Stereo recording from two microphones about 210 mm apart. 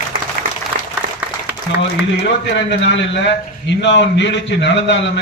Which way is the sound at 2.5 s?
60° left (ahead or behind).